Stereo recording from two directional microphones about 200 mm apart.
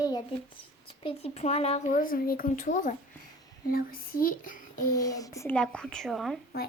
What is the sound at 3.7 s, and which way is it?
Child singing, 45° left (ahead or behind).